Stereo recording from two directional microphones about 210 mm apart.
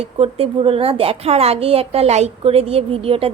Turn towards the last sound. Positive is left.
turn(degrees=-25)  # may be behind; listen again after turning